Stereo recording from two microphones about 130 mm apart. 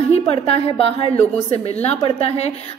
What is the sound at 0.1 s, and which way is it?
A woman's voice, 50° left (ahead or behind).